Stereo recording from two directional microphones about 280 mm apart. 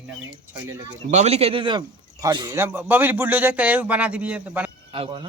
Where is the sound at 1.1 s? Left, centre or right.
Right; by 4.7 s centre.